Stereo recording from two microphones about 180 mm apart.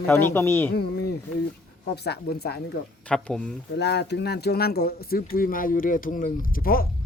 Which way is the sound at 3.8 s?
70° left (ahead or behind).